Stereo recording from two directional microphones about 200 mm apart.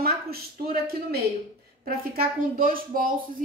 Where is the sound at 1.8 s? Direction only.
45° right (ahead or behind).